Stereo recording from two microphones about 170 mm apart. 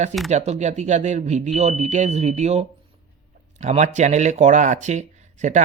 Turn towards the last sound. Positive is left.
turn(degrees=-45)  # may be behind; listen again after turning